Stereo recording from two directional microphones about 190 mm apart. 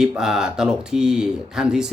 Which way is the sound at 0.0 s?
5° right (ahead or behind).